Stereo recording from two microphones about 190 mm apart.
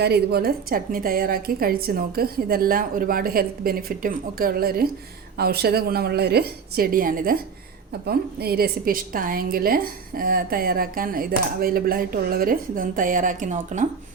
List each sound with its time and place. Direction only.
0.0 s a woman's voice: 60° right (ahead or behind); by 13.8 s 40° right (ahead or behind)